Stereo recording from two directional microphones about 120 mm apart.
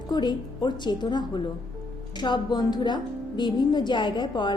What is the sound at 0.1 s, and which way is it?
Speech, 35° left (ahead or behind).